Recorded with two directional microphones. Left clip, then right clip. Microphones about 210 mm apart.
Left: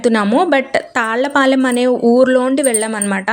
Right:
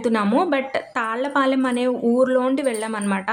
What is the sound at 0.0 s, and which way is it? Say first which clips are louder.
A woman's voice: left 6 dB; 25° left (ahead or behind).